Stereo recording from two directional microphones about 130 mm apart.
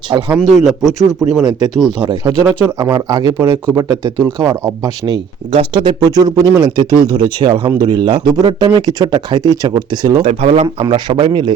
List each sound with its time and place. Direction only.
0.3 s a man's voice: centre (ahead or behind)
1.5 s speech: 60° left (ahead or behind)
2.2 s speech: 20° right (ahead or behind)
5.5 s speech: 45° right (ahead or behind)
10.2 s speech: 55° right (ahead or behind)
10.8 s speech: 35° right (ahead or behind)